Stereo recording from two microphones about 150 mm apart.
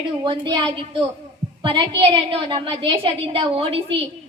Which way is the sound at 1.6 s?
35° right (ahead or behind).